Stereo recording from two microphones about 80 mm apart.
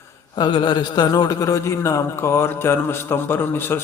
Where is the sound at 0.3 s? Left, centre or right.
Left.